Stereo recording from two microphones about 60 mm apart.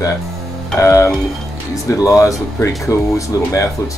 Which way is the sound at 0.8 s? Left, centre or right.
Left.